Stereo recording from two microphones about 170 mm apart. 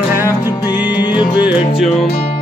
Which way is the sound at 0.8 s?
10° right (ahead or behind).